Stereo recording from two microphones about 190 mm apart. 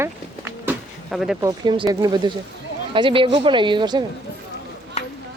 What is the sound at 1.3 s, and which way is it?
Speech, 20° right (ahead or behind).